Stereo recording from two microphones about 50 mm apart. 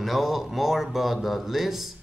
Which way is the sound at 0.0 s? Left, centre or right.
Centre.